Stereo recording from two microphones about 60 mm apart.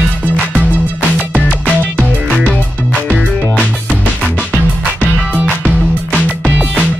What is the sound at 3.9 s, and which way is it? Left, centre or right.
Music, centre.